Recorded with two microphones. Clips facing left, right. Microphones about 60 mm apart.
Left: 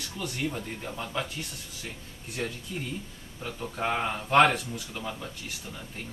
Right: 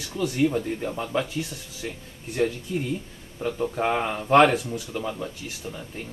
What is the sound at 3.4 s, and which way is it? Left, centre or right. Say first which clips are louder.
Speech: right 7 dB; right.